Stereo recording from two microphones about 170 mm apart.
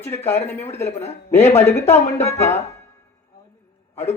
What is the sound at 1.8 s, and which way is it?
Speech, 40° left (ahead or behind).